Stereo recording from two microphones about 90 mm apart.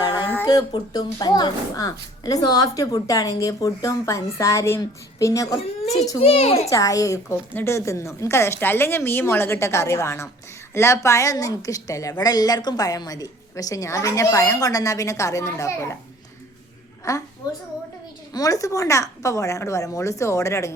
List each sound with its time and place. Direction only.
0.4 s a woman's voice: 45° left (ahead or behind)
6.2 s a child's voice: 90° left
6.7 s a woman's voice: 40° left (ahead or behind)
17.1 s a woman's voice: 40° left (ahead or behind)
18.3 s a woman's voice: 40° left (ahead or behind)